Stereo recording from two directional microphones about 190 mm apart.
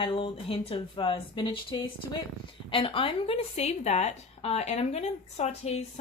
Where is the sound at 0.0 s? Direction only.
25° left (ahead or behind).